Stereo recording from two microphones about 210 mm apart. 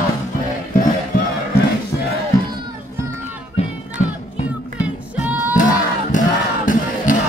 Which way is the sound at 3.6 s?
30° left (ahead or behind).